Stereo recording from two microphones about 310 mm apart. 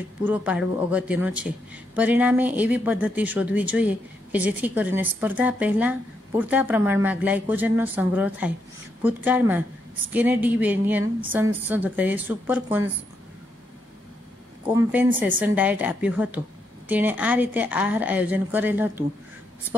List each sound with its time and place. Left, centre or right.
0.2 s speech: centre
14.7 s speech: centre